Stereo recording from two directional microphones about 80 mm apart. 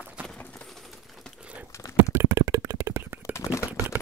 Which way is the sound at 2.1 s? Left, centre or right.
Right.